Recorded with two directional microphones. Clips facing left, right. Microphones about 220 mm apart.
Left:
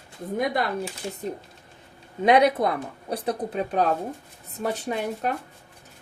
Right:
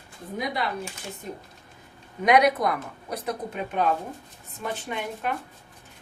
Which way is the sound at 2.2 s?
30° left (ahead or behind).